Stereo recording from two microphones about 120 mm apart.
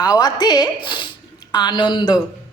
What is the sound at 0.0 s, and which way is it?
A woman's voice, 35° left (ahead or behind).